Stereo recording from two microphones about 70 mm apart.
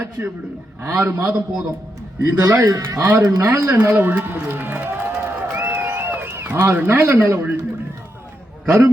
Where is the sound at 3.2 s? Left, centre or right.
Right.